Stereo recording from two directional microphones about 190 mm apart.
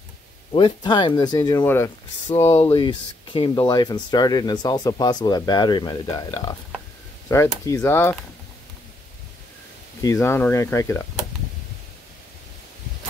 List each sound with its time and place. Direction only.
0.5 s speech: 25° left (ahead or behind)
10.0 s speech: 15° left (ahead or behind)